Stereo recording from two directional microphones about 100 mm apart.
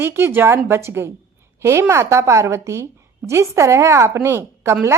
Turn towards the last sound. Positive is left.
turn(degrees=-25)  # may be behind; listen again after turning